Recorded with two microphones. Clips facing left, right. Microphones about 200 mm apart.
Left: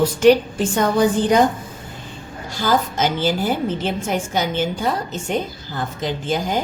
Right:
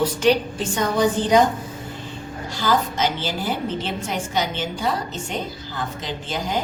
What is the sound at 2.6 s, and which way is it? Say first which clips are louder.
A woman's voice: left 2 dB; 45° left (ahead or behind).